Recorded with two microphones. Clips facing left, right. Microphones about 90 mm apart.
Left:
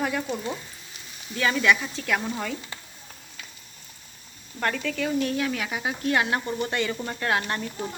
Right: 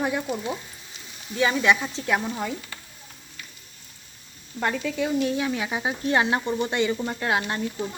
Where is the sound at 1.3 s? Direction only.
20° right (ahead or behind).